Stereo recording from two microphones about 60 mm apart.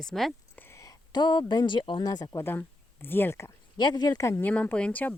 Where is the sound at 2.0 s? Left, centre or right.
Left.